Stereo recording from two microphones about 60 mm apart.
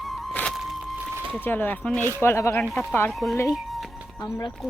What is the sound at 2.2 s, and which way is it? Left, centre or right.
Speech, left.